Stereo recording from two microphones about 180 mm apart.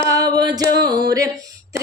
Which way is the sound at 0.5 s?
20° right (ahead or behind).